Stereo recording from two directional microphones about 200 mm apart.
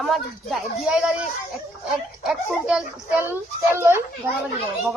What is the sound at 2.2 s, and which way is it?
A woman's voice, centre (ahead or behind).